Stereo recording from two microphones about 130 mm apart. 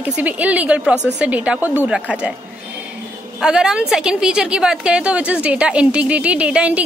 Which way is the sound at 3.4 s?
5° right (ahead or behind).